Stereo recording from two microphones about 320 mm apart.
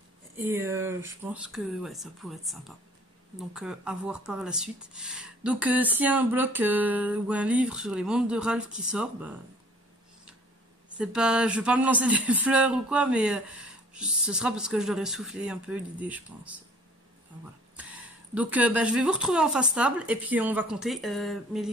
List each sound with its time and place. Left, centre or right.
0.4 s speech: centre
11.0 s speech: centre
17.7 s speech: centre